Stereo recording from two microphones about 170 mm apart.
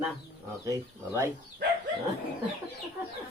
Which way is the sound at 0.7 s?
15° right (ahead or behind).